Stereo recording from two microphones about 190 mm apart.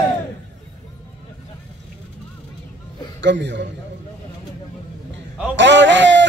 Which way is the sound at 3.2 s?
70° right (ahead or behind).